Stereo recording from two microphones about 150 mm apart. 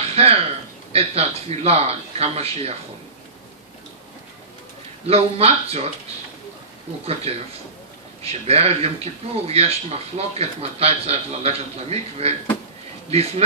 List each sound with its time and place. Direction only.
0.0 s a sound: 45° right (ahead or behind)
0.9 s speech: 45° right (ahead or behind)
5.0 s speech: 45° right (ahead or behind)
7.3 s speech: 40° right (ahead or behind)